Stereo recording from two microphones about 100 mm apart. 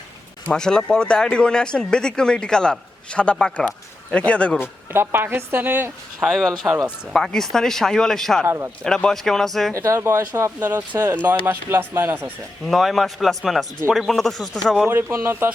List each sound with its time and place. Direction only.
0.4 s speech: 5° left (ahead or behind)
4.9 s speech: 20° right (ahead or behind)
6.1 s speech: centre (ahead or behind)
8.4 s speech: 25° right (ahead or behind)
8.8 s speech: 5° left (ahead or behind)
9.7 s speech: 30° right (ahead or behind)
12.6 s speech: centre (ahead or behind)
14.8 s speech: 25° right (ahead or behind)